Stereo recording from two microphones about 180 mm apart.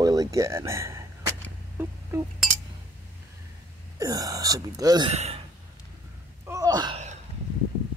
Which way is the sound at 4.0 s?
20° right (ahead or behind).